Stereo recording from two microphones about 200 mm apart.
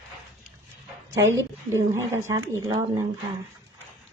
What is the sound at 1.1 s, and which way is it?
A woman's voice, 15° right (ahead or behind).